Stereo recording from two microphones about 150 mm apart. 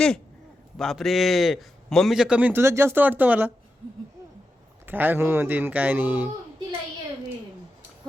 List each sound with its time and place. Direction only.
0.8 s speech: centre (ahead or behind)
4.9 s speech: 15° right (ahead or behind)